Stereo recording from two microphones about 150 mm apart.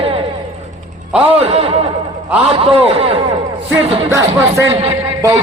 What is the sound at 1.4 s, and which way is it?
Speech, 40° right (ahead or behind).